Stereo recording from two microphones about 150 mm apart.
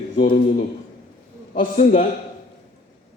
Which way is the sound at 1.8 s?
60° left (ahead or behind).